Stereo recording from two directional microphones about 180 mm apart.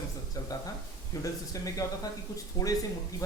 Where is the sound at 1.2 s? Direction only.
20° left (ahead or behind).